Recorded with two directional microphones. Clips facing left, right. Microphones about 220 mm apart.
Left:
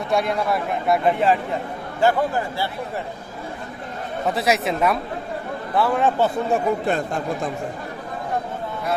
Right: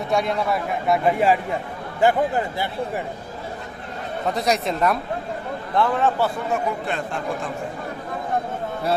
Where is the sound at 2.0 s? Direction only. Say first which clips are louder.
Even; 15° right (ahead or behind).